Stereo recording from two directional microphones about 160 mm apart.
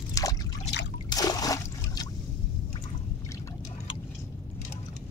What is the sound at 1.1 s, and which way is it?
Trickle, 25° left (ahead or behind).